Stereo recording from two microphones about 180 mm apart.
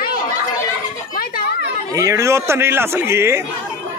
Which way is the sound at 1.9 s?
20° right (ahead or behind).